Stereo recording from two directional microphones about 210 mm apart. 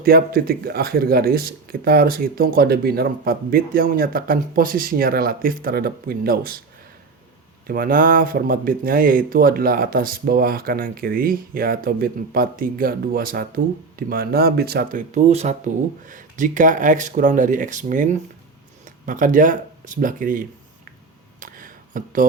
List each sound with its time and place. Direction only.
0.0 s speech: 45° right (ahead or behind)
7.7 s speech: 45° right (ahead or behind)
21.4 s a sound: 40° right (ahead or behind)